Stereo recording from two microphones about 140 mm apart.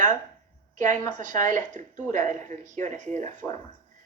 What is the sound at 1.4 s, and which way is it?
Speech, 60° right (ahead or behind).